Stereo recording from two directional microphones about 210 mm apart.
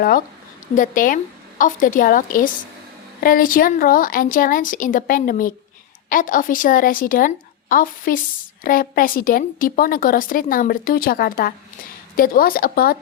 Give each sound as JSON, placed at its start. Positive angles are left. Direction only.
{"t": 0.7, "sound": "a woman's voice", "side_deg": 40}